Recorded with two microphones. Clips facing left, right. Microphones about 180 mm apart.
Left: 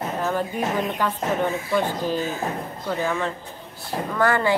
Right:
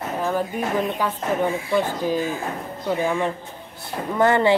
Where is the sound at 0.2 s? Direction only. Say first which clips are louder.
Right 2 dB; 10° right (ahead or behind).